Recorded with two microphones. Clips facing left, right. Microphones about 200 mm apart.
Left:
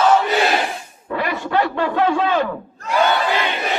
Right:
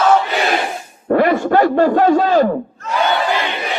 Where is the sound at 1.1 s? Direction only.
50° right (ahead or behind).